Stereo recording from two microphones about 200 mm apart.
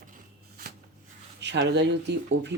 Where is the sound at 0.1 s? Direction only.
45° right (ahead or behind).